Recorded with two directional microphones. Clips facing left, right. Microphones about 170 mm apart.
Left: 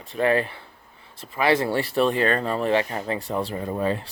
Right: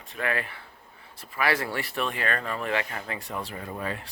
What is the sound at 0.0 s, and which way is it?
Speech, 30° left (ahead or behind).